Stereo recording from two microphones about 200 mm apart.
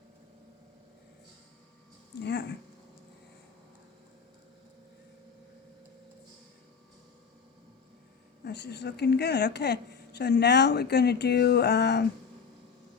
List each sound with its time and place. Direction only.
2.2 s speech: 60° left (ahead or behind)
8.4 s speech: 60° left (ahead or behind)